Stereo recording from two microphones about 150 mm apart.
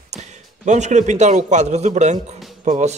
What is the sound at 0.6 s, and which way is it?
A man's voice, 50° right (ahead or behind).